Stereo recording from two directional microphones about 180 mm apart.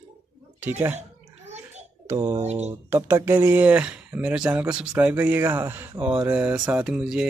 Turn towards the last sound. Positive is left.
turn(degrees=-5)  # may be behind; listen again after turning